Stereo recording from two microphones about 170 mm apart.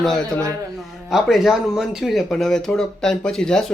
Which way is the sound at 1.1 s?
Centre (ahead or behind).